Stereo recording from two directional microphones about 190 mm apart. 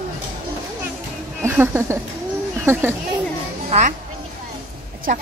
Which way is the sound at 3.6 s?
35° right (ahead or behind).